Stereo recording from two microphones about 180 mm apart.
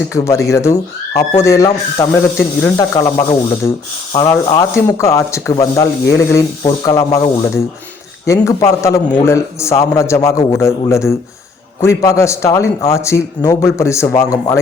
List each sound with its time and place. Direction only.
0.5 s a man's voice: 15° left (ahead or behind)
2.7 s a man's voice: 25° left (ahead or behind)